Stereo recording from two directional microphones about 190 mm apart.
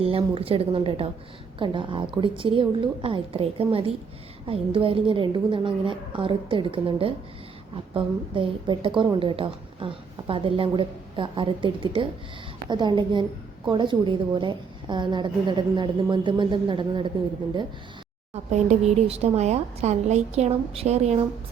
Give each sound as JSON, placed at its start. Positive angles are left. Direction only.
{"t": 0.0, "sound": "a woman's voice", "side_deg": -30}
{"t": 18.5, "sound": "a woman's voice", "side_deg": -35}